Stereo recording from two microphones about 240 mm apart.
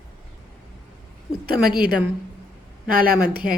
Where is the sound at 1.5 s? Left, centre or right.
Right.